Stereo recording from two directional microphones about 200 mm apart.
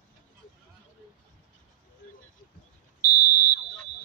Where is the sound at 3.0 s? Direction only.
20° left (ahead or behind).